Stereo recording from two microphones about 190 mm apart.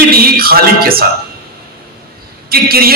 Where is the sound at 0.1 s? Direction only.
55° right (ahead or behind).